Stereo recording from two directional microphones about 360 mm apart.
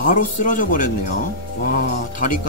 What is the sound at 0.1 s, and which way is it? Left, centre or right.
Speech, left.